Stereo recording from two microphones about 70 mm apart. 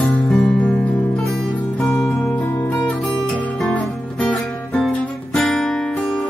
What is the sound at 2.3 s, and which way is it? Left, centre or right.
Music, left.